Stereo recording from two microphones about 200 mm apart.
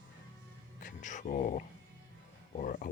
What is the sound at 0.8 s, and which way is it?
Speech, 40° left (ahead or behind).